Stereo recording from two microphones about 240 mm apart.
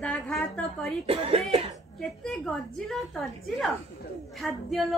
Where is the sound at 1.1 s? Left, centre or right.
Right.